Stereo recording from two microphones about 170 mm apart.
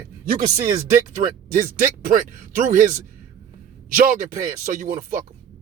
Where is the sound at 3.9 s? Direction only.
55° right (ahead or behind).